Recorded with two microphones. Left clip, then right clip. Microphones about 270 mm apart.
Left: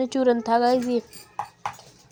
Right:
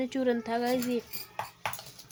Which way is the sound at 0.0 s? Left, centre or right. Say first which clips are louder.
Left 8 dB; centre.